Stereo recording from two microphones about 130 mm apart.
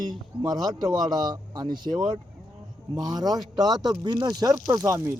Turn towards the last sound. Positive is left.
turn(degrees=-25)  # may be behind; listen again after turning